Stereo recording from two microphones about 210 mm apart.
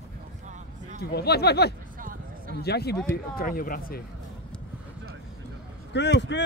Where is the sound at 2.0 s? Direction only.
40° right (ahead or behind).